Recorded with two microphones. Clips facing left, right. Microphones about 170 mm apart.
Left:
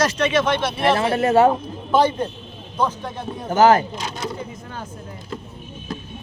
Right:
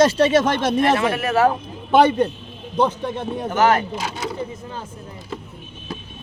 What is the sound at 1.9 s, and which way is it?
A man's voice, 70° right (ahead or behind).